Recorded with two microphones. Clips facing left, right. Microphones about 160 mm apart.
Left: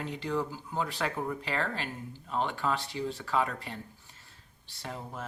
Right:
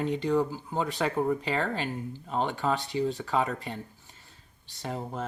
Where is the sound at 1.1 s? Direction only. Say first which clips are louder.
Right 7 dB; 35° right (ahead or behind).